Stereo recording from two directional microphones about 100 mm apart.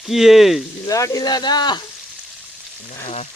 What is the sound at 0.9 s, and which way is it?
Speech, 35° left (ahead or behind).